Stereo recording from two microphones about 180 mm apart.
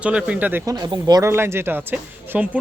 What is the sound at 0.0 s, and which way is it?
Speech, 5° right (ahead or behind).